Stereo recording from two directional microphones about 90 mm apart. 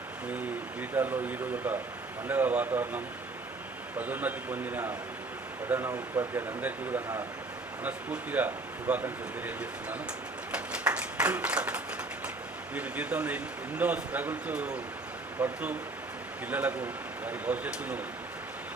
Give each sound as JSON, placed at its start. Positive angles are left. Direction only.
{"t": 0.3, "sound": "speech", "side_deg": -20}
{"t": 10.5, "sound": "clapping", "side_deg": -15}
{"t": 12.7, "sound": "speech", "side_deg": -15}